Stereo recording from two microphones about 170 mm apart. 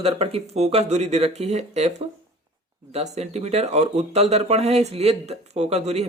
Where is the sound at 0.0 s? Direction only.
35° right (ahead or behind).